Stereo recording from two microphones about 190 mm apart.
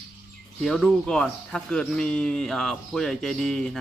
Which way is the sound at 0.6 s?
Centre (ahead or behind).